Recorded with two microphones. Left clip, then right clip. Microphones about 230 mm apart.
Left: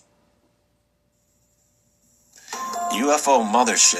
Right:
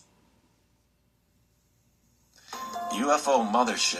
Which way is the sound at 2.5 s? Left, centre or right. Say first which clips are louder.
Left 8 dB; left.